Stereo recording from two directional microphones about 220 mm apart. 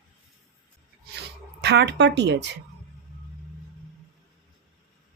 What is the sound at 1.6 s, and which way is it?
Speech, 50° right (ahead or behind).